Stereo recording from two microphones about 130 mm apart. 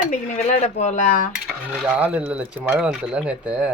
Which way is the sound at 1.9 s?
10° right (ahead or behind).